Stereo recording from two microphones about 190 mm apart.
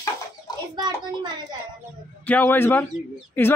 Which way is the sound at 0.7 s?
20° right (ahead or behind).